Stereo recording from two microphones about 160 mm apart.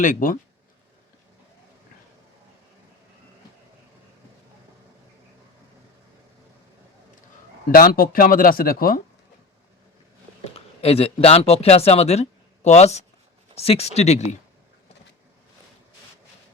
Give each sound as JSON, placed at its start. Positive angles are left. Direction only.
{"t": 0.0, "sound": "speech", "side_deg": 55}
{"t": 7.7, "sound": "speech", "side_deg": 65}
{"t": 10.4, "sound": "speech", "side_deg": 40}